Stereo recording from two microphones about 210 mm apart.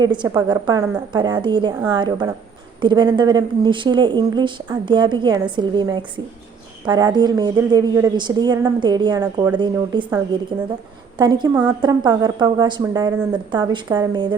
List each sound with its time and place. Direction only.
0.0 s speech: 20° right (ahead or behind)
11.2 s a woman's voice: 20° right (ahead or behind)